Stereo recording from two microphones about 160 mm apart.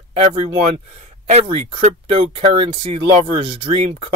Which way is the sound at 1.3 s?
40° right (ahead or behind).